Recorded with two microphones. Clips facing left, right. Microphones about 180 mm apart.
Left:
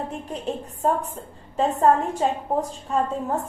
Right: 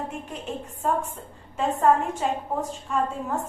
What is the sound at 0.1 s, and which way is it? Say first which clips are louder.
A woman's voice: left 4 dB; 35° left (ahead or behind).